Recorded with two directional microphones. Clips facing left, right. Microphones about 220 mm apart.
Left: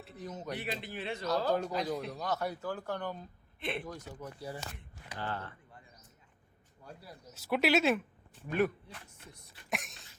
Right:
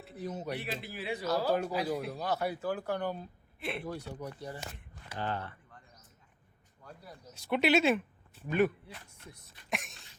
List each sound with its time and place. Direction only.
0.3 s speech: 5° right (ahead or behind)
4.4 s speech: 10° left (ahead or behind)
5.1 s speech: 15° right (ahead or behind)
6.8 s speech: 5° left (ahead or behind)
9.6 s a sound: centre (ahead or behind)